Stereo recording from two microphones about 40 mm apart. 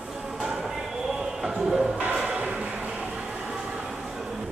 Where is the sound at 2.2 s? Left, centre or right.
Right.